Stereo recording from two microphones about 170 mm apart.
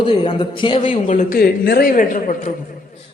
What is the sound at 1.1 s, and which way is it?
Speech, 50° left (ahead or behind).